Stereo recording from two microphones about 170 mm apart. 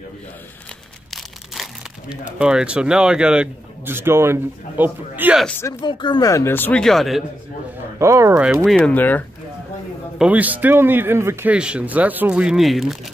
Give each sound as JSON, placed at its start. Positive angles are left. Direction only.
{"t": 1.1, "sound": "speech", "side_deg": 0}
{"t": 5.8, "sound": "speech", "side_deg": 25}
{"t": 8.0, "sound": "speech", "side_deg": -15}
{"t": 8.6, "sound": "speech", "side_deg": 5}
{"t": 10.1, "sound": "speech", "side_deg": -10}